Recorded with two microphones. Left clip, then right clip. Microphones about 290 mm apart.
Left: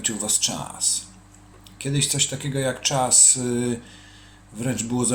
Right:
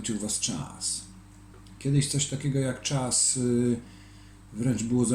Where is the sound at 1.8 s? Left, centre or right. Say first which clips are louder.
Left 6 dB; left.